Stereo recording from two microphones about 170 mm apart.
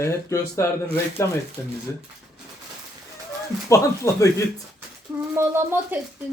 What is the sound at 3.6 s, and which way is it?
Speech, 20° left (ahead or behind).